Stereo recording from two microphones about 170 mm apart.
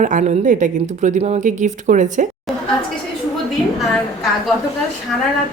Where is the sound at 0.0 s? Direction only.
45° right (ahead or behind).